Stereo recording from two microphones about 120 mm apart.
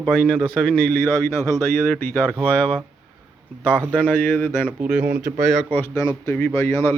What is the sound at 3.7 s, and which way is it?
Speech, 10° right (ahead or behind).